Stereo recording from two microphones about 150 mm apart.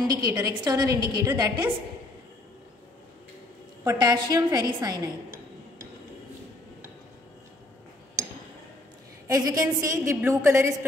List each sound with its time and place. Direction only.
0.3 s a woman's voice: 25° right (ahead or behind)
3.8 s a woman's voice: 25° right (ahead or behind)
8.2 s a sound: 20° right (ahead or behind)
9.3 s a woman's voice: 25° right (ahead or behind)